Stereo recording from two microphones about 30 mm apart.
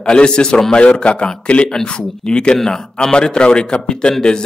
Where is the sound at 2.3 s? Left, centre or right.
Left.